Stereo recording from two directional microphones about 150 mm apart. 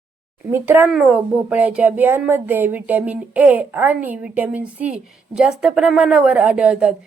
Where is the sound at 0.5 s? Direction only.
15° right (ahead or behind).